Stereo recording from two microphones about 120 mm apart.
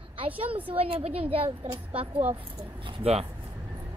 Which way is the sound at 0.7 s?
55° right (ahead or behind).